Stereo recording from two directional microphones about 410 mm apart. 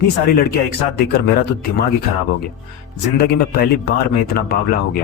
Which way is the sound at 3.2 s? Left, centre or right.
Left.